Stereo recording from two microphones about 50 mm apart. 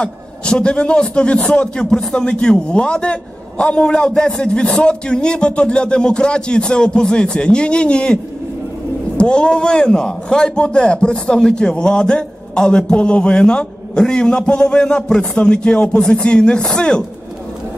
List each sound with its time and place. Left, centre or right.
0.0 s a man's voice: centre